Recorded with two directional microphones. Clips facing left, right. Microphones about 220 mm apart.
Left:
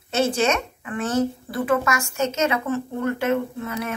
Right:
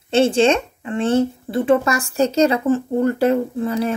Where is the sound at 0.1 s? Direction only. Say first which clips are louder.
Right 6 dB; 30° right (ahead or behind).